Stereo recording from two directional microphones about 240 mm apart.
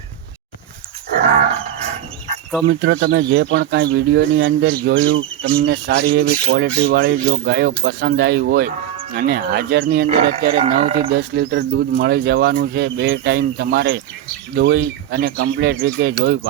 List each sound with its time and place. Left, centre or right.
2.6 s speech: right
10.6 s speech: right
11.1 s speech: right